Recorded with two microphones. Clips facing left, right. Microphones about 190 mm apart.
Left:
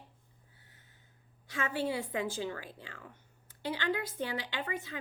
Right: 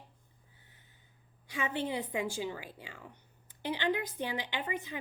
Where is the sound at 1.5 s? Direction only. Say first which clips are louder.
Left 1 dB; 15° right (ahead or behind).